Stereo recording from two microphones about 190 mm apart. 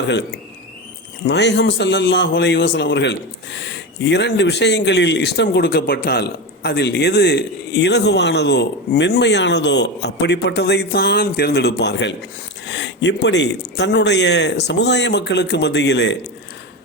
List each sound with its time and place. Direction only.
1.2 s a man's voice: 65° left (ahead or behind)